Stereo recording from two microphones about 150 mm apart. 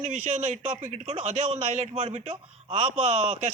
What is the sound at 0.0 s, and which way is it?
Speech, 50° right (ahead or behind).